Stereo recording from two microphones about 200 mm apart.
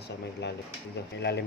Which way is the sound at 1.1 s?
60° left (ahead or behind).